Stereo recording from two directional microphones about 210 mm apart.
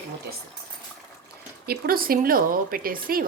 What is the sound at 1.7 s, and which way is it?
Speech, 45° right (ahead or behind).